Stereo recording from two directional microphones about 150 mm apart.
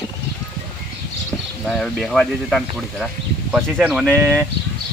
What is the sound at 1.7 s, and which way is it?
Speech, centre (ahead or behind).